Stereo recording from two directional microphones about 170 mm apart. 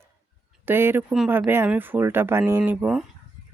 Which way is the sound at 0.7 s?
15° right (ahead or behind).